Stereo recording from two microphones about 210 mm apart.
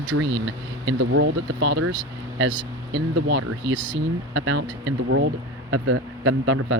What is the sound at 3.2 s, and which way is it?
Speech, 65° right (ahead or behind).